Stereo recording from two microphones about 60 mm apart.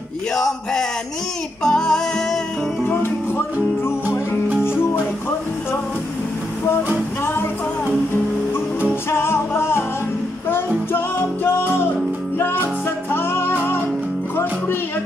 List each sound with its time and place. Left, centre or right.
0.3 s speech: centre
1.6 s female singing: centre
2.9 s music: left
9.1 s music: left
12.4 s music: left